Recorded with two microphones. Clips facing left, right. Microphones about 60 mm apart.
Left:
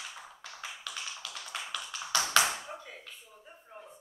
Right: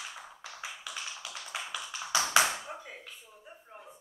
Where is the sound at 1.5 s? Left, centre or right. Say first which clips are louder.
Right 1 dB; centre.